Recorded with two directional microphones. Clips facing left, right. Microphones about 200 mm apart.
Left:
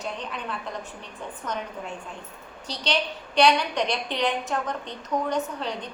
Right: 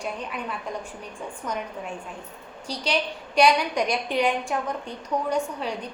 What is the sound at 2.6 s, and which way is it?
A woman's voice, 10° right (ahead or behind).